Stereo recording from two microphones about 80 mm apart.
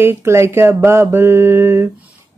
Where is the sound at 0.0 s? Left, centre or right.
Right.